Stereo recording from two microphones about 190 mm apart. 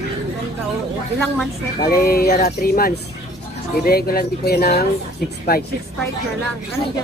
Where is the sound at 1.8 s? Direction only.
50° left (ahead or behind).